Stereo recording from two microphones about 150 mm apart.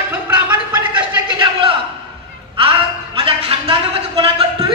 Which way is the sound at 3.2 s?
40° right (ahead or behind).